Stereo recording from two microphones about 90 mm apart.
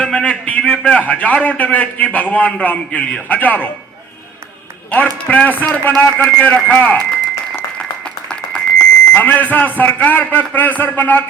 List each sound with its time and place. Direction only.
0.0 s a man's voice: 10° left (ahead or behind)
4.9 s a man's voice: 20° left (ahead or behind)
8.3 s a sound: 5° left (ahead or behind)
9.1 s a man's voice: 20° left (ahead or behind)